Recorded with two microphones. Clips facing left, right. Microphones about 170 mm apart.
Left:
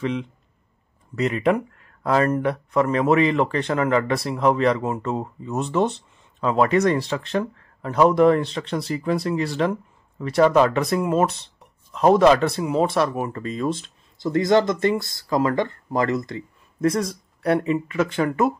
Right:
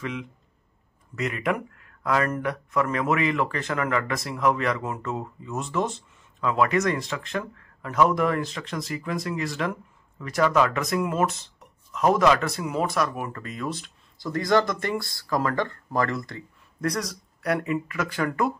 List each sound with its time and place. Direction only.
0.0 s speech: 30° left (ahead or behind)